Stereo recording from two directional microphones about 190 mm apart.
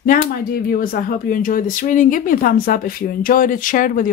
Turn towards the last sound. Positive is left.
turn(degrees=45)  # may be behind; listen again after turning